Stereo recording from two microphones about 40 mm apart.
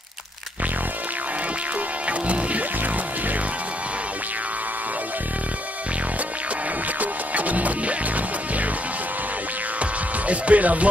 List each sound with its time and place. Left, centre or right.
2.0 s music: right
7.0 s music: right
9.8 s music: right